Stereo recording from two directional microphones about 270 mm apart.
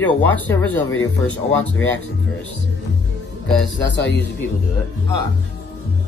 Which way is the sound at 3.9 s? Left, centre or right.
Left.